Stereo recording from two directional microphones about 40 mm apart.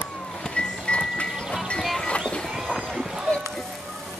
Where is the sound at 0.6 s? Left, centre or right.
Left.